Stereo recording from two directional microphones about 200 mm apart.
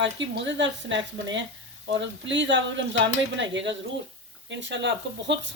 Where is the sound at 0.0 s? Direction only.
65° right (ahead or behind).